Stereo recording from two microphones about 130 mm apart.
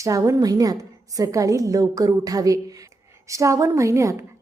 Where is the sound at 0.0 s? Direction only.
25° right (ahead or behind).